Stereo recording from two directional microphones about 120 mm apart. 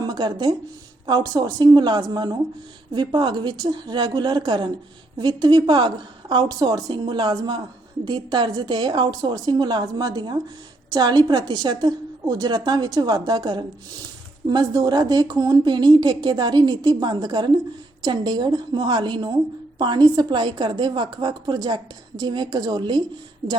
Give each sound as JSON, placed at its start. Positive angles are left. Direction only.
{"t": 0.0, "sound": "a woman's voice", "side_deg": -35}